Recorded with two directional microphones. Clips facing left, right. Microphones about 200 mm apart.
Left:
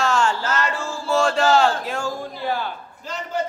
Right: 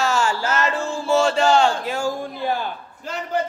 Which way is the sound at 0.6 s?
20° right (ahead or behind).